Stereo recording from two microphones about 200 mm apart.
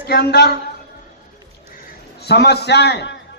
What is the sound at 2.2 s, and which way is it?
Speech, 55° left (ahead or behind).